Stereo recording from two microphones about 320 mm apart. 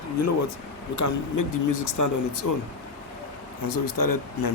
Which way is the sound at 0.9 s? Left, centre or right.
Left.